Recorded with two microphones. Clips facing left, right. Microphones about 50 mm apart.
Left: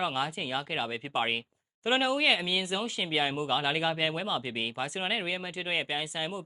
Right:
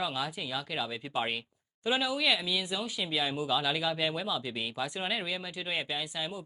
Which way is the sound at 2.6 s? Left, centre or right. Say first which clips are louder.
Left 3 dB; left.